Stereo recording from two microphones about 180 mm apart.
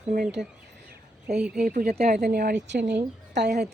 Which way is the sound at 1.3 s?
5° right (ahead or behind).